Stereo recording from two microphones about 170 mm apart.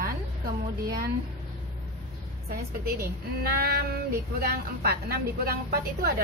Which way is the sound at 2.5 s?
60° right (ahead or behind).